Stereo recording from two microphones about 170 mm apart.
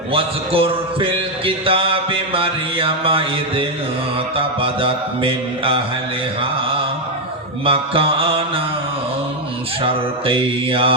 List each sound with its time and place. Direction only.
0.1 s a man's voice: 35° right (ahead or behind)
7.6 s mantra: 30° right (ahead or behind)
9.8 s a man's voice: 30° right (ahead or behind)